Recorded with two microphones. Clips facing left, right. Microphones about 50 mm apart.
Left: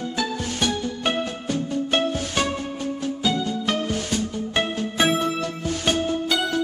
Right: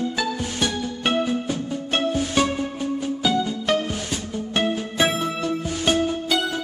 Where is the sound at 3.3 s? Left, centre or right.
Centre.